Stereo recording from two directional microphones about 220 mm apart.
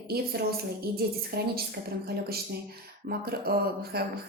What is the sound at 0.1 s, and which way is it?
A woman's voice, 45° right (ahead or behind).